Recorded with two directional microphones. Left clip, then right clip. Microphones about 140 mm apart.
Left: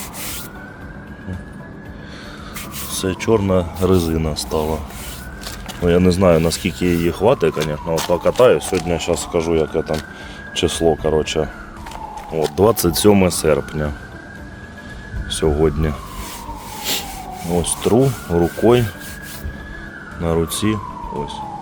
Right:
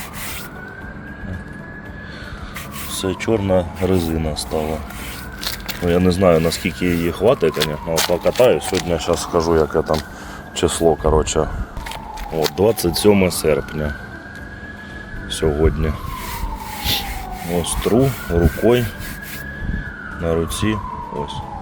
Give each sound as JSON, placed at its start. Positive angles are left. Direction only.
{"t": 2.9, "sound": "speech", "side_deg": 20}
{"t": 5.8, "sound": "speech", "side_deg": 20}
{"t": 8.9, "sound": "speech", "side_deg": 10}
{"t": 12.5, "sound": "speech", "side_deg": 35}
{"t": 15.3, "sound": "speech", "side_deg": 25}
{"t": 16.8, "sound": "rub", "side_deg": 35}
{"t": 17.6, "sound": "speech", "side_deg": 20}
{"t": 20.2, "sound": "speech", "side_deg": 25}